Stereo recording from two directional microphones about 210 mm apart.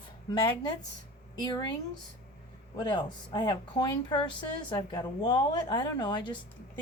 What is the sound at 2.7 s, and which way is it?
A woman's voice, 20° left (ahead or behind).